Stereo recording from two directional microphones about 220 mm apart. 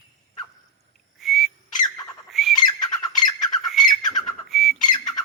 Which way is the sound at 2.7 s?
20° left (ahead or behind).